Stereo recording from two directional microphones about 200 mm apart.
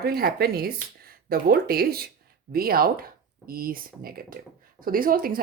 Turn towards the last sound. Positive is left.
turn(degrees=-45)  # may be behind; listen again after turning